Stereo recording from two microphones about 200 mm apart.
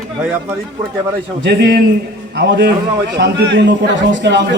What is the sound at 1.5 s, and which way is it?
A man's voice, 55° right (ahead or behind).